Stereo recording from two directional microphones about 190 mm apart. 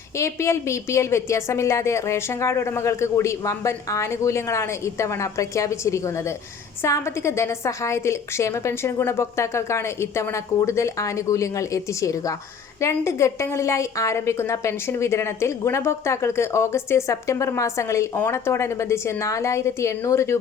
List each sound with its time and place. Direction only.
0.2 s a woman's voice: 15° left (ahead or behind)